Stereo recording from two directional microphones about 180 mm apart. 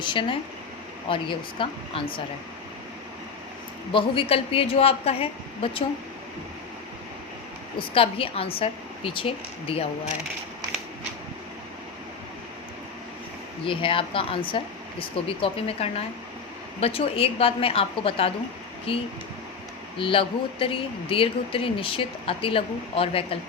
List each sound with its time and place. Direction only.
0.0 s speech: 25° left (ahead or behind)
3.9 s speech: 30° left (ahead or behind)
7.8 s speech: 30° left (ahead or behind)
13.7 s speech: 30° left (ahead or behind)